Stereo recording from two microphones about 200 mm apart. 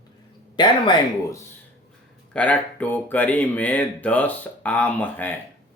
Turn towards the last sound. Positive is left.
turn(degrees=10)  # may be behind; listen again after turning